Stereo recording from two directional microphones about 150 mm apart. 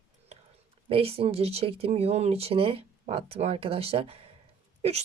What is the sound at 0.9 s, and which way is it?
A woman's voice, 40° right (ahead or behind).